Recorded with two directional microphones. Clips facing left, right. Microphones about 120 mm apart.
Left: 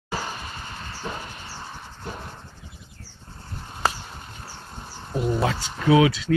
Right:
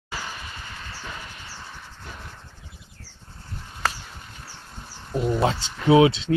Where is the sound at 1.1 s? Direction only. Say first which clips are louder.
Left 6 dB; 40° left (ahead or behind).